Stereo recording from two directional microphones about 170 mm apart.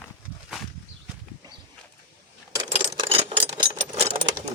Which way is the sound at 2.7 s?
30° right (ahead or behind).